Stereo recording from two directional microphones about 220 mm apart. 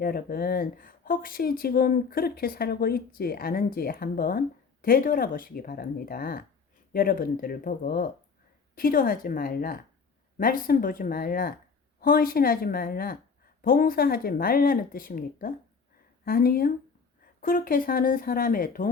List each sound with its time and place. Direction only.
0.0 s speech: 40° left (ahead or behind)